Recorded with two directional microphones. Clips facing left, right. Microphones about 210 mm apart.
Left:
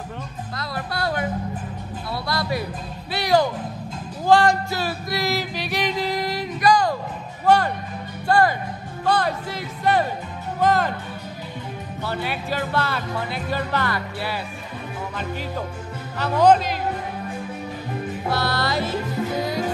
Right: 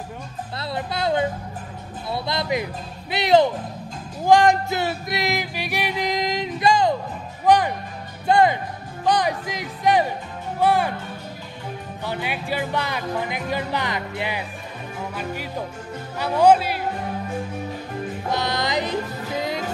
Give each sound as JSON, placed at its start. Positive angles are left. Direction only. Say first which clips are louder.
{"t": 0.6, "sound": "speech", "louder": "right 2 dB", "side_deg": -20}
{"t": 4.3, "sound": "music", "louder": "right 1 dB", "side_deg": -15}
{"t": 7.4, "sound": "speech", "louder": "even", "side_deg": -15}
{"t": 12.0, "sound": "speech", "louder": "left 1 dB", "side_deg": -15}
{"t": 16.2, "sound": "speech", "louder": "even", "side_deg": -10}
{"t": 18.3, "sound": "speech", "louder": "even", "side_deg": -20}